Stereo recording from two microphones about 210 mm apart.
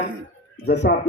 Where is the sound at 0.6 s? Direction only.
55° left (ahead or behind).